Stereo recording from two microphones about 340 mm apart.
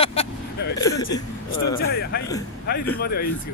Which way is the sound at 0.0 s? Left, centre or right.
Centre.